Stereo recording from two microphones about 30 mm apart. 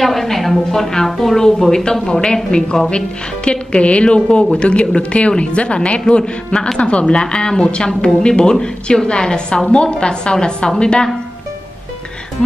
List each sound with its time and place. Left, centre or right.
0.0 s a woman's voice: centre
1.7 s a woman's voice: left
3.4 s a woman's voice: left